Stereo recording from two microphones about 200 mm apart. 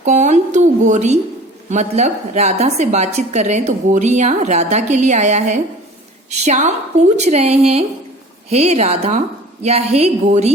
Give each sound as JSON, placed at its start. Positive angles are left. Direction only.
{"t": 0.0, "sound": "a woman's voice", "side_deg": -35}